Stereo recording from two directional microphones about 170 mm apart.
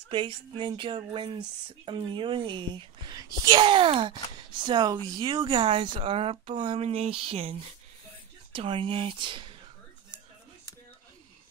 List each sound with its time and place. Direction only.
0.1 s speech: 30° right (ahead or behind)